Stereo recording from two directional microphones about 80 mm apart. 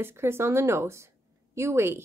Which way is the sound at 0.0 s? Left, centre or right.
Right.